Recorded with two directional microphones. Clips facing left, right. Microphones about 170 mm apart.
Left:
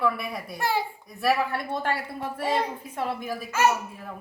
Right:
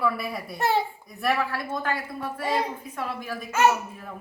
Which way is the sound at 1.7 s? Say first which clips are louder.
Left 1 dB; 30° left (ahead or behind).